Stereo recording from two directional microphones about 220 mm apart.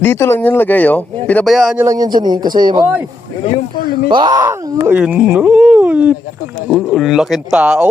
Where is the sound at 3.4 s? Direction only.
30° left (ahead or behind).